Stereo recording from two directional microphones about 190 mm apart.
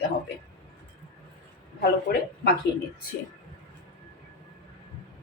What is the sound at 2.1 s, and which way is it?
Speech, 55° left (ahead or behind).